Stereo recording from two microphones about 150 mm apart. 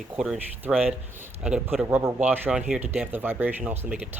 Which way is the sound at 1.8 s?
15° right (ahead or behind).